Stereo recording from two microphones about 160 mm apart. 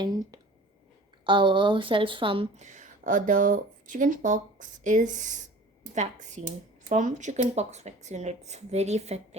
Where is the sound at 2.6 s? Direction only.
50° right (ahead or behind).